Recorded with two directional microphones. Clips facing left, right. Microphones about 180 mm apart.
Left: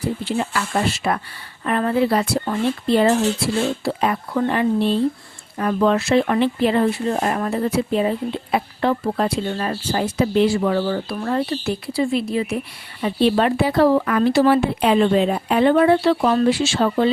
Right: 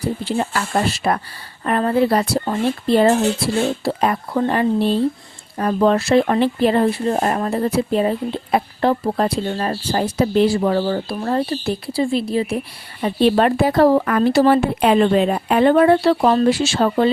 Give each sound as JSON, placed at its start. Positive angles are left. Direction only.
{"t": 0.3, "sound": "speech", "side_deg": -40}
{"t": 13.0, "sound": "speech", "side_deg": -45}